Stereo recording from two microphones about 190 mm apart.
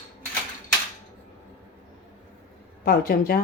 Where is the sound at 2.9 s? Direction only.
50° left (ahead or behind).